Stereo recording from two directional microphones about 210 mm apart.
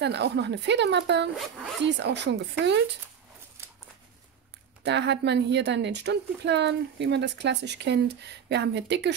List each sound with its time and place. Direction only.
0.0 s a woman's voice: 55° right (ahead or behind)
4.8 s a woman's voice: 55° right (ahead or behind)